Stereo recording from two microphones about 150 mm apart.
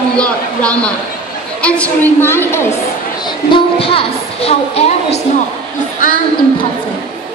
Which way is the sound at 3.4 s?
40° left (ahead or behind).